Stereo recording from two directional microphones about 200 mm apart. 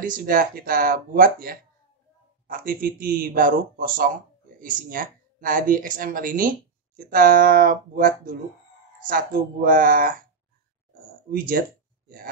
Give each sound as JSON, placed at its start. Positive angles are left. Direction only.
{"t": 0.0, "sound": "speech", "side_deg": -45}
{"t": 11.2, "sound": "speech", "side_deg": -45}